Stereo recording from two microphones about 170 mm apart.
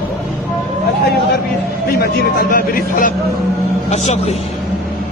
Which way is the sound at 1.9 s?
60° left (ahead or behind).